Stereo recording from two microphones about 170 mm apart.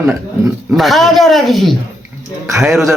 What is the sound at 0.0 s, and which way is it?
Speech, 15° right (ahead or behind).